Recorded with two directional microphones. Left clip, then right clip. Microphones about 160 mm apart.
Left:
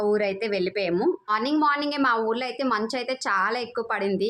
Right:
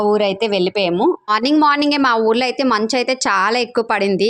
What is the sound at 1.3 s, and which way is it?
A woman's voice, 55° right (ahead or behind).